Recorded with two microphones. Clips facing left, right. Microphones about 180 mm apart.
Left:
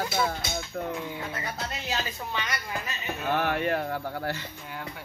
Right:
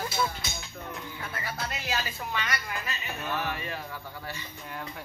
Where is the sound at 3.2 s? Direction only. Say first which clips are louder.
Left 7 dB; 70° left (ahead or behind).